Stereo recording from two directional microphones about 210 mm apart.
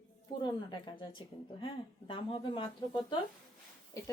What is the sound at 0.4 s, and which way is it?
A woman's voice, 20° left (ahead or behind).